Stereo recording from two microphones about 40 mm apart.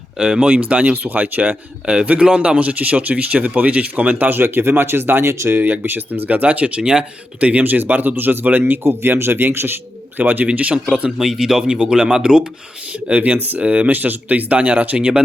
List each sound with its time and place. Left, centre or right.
0.2 s a man's voice: centre
0.5 s speech: right
1.9 s a man's voice: right
2.6 s speech: right
4.4 s speech: right
5.8 s speech: right
7.6 s speech: right
8.8 s speech: right
10.2 s speech: right
10.4 s speech: right
11.2 s speech: centre
13.1 s speech: right
13.9 s speech: right
14.9 s a man's voice: right